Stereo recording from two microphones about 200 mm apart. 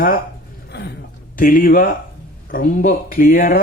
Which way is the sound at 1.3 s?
45° left (ahead or behind).